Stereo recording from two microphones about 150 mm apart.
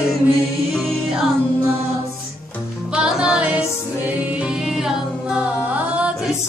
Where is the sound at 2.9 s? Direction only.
5° right (ahead or behind).